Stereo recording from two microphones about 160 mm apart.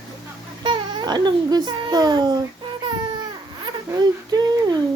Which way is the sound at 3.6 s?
25° right (ahead or behind).